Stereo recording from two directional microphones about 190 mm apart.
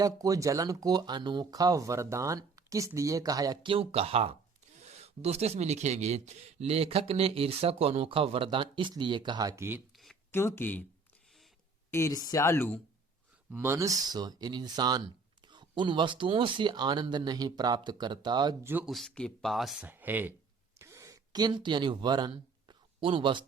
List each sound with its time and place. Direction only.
0.0 s speech: 20° right (ahead or behind)
9.9 s a sound: centre (ahead or behind)
10.3 s speech: 10° left (ahead or behind)
11.9 s speech: 15° left (ahead or behind)
13.5 s speech: 10° right (ahead or behind)
18.7 s speech: 5° right (ahead or behind)
20.7 s a sound: 15° right (ahead or behind)